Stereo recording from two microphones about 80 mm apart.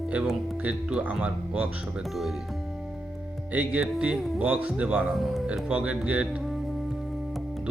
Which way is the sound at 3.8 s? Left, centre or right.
Centre.